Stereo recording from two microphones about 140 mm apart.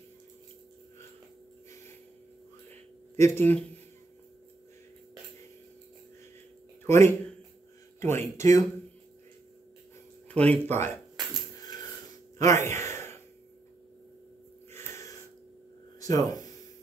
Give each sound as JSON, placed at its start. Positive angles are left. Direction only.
{"t": 3.2, "sound": "speech", "side_deg": 20}
{"t": 6.9, "sound": "speech", "side_deg": 20}
{"t": 10.4, "sound": "speech", "side_deg": 15}
{"t": 12.4, "sound": "a sound", "side_deg": 20}
{"t": 16.0, "sound": "speech", "side_deg": 25}